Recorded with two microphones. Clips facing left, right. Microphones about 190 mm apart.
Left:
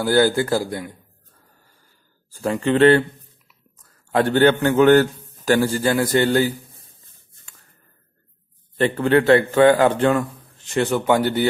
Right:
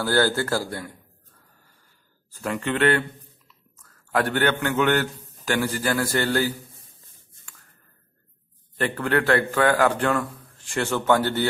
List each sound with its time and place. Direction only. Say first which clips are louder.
0.0 s a man's voice: left 5 dB; 15° left (ahead or behind)
2.4 s speech: left 7 dB; 30° left (ahead or behind)
4.1 s speech: left 7 dB; 25° left (ahead or behind)
8.7 s speech: left 6 dB; 25° left (ahead or behind)